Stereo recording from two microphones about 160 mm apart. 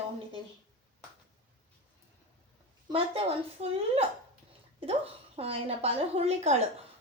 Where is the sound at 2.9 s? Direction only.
35° right (ahead or behind).